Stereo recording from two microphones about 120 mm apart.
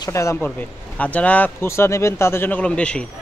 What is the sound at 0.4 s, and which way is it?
Speech, 10° left (ahead or behind).